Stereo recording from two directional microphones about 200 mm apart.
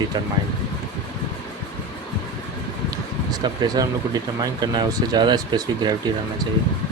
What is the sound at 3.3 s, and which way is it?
Speech, 20° right (ahead or behind).